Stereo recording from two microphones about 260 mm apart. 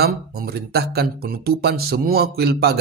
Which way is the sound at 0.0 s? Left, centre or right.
Right.